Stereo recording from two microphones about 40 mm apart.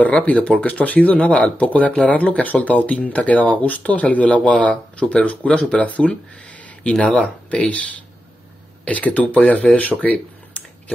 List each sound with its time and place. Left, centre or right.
0.2 s speech: left
3.1 s speech: left
3.3 s speech: left
8.8 s speech: left